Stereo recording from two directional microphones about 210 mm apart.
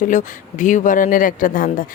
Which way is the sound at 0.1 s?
35° left (ahead or behind).